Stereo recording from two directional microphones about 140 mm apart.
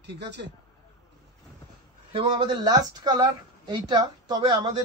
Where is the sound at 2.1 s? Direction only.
35° right (ahead or behind).